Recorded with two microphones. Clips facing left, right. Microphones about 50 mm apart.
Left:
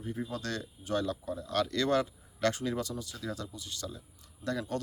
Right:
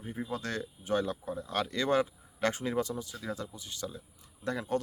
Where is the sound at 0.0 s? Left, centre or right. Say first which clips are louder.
Even; centre.